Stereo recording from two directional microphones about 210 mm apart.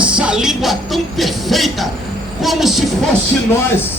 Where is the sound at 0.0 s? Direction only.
5° right (ahead or behind).